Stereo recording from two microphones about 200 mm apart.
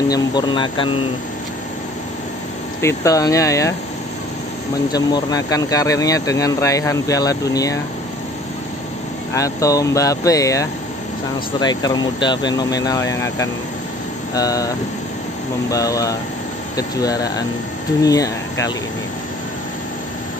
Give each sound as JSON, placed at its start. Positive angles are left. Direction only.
{"t": 0.1, "sound": "speech", "side_deg": 20}
{"t": 2.8, "sound": "speech", "side_deg": 15}
{"t": 4.9, "sound": "speech", "side_deg": 20}
{"t": 9.3, "sound": "speech", "side_deg": 15}
{"t": 15.7, "sound": "speech", "side_deg": 15}